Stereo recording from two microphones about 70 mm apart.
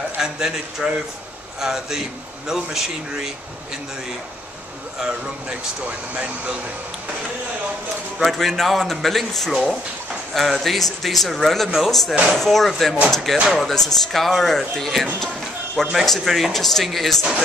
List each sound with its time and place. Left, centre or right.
0.2 s a man's voice: centre
5.0 s a man's voice: centre
8.2 s a man's voice: centre